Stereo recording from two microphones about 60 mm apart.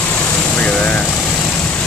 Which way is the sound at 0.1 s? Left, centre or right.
Centre.